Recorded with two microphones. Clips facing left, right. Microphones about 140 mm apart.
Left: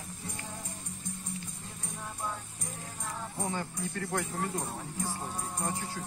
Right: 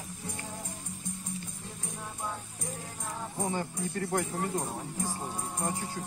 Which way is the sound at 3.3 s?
15° right (ahead or behind).